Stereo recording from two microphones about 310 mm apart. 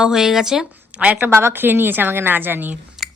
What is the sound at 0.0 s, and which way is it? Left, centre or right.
A woman's voice, centre.